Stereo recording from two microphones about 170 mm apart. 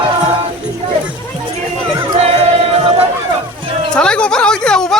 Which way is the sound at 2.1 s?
35° right (ahead or behind).